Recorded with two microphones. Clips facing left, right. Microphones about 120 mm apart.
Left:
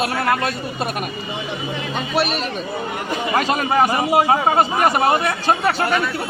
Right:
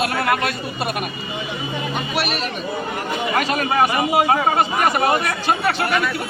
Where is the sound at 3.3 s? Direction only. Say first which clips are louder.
Left 2 dB; 30° left (ahead or behind).